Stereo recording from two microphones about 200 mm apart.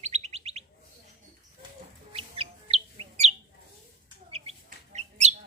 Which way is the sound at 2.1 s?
30° right (ahead or behind).